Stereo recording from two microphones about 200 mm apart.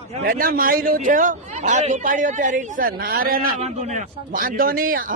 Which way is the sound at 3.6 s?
35° right (ahead or behind).